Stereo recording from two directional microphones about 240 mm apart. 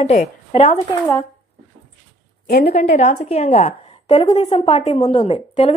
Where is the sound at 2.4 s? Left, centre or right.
Left.